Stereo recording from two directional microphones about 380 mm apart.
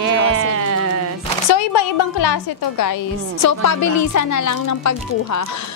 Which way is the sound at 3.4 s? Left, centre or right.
Left.